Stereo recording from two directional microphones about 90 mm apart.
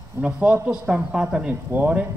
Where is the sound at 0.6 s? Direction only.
15° right (ahead or behind).